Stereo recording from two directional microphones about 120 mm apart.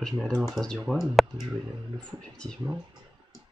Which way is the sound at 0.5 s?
Centre (ahead or behind).